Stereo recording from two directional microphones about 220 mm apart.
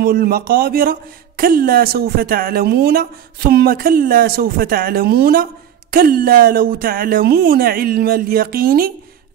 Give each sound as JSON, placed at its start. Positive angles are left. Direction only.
{"t": 0.0, "sound": "a man's voice", "side_deg": -40}